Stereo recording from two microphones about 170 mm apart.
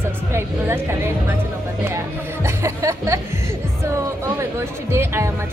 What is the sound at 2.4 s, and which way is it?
Music, 15° right (ahead or behind).